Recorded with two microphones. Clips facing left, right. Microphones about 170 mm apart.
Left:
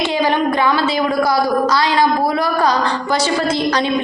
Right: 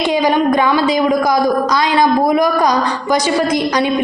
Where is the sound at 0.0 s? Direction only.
15° right (ahead or behind).